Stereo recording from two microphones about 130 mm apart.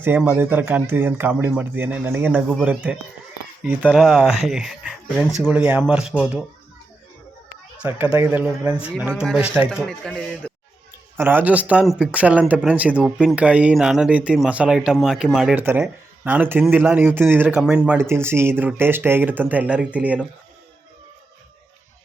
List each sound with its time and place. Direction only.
0.2 s speech: 15° right (ahead or behind)
5.4 s speech: 15° right (ahead or behind)
7.8 s speech: 15° right (ahead or behind); by 10.1 s centre (ahead or behind)
10.4 s a sound: 10° left (ahead or behind)
11.2 s speech: 15° right (ahead or behind)
16.2 s speech: 15° right (ahead or behind)
17.9 s speech: 20° right (ahead or behind)